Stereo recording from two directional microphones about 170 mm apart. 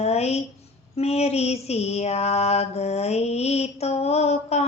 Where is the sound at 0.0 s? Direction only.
40° left (ahead or behind).